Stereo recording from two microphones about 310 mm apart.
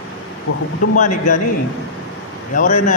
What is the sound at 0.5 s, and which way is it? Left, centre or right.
Speech, left.